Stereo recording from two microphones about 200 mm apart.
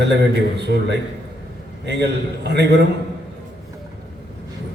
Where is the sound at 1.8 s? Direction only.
55° right (ahead or behind).